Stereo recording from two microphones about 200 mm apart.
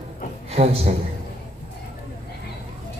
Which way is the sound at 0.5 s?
30° right (ahead or behind).